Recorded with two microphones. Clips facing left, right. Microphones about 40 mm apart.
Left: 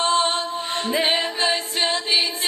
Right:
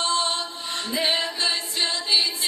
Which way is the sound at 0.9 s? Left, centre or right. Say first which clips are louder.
Left 3 dB; left.